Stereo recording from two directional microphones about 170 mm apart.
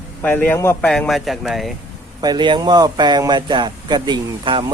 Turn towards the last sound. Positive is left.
turn(degrees=-30)  # may be behind; listen again after turning